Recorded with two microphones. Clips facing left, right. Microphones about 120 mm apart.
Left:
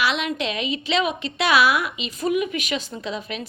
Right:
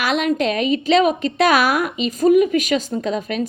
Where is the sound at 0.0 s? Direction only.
45° right (ahead or behind).